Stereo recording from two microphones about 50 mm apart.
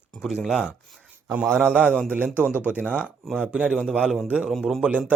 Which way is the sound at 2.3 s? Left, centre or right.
Right.